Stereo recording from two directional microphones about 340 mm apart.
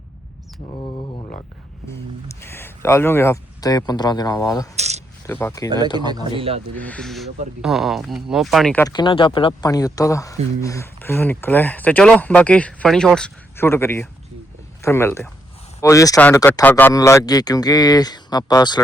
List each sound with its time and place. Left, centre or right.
0.8 s speech: centre
4.8 s speech: centre
5.2 s speech: centre
6.1 s speech: centre
6.7 s speech: centre